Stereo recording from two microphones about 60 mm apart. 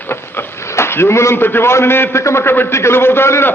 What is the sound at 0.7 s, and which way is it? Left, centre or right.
A man's voice, left.